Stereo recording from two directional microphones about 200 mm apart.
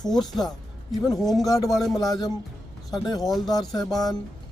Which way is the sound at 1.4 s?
15° left (ahead or behind).